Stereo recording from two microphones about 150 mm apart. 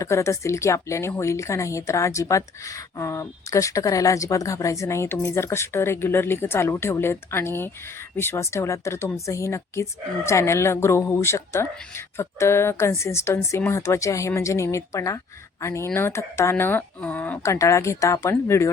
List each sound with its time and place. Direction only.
0.0 s speech: 20° left (ahead or behind)